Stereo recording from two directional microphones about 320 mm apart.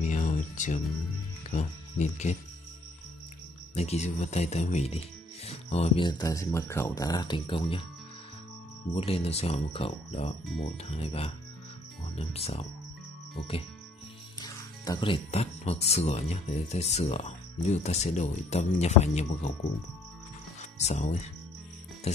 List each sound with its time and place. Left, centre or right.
0.0 s music: left
1.5 s speech: left
3.7 s speech: left
8.9 s speech: centre
14.4 s speech: centre
20.8 s speech: left
22.1 s music: centre